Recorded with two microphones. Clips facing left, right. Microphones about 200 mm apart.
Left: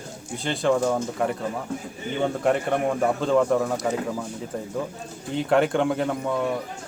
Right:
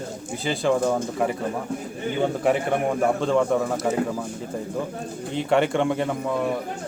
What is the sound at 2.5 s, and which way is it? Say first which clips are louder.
A man's voice: even; centre (ahead or behind).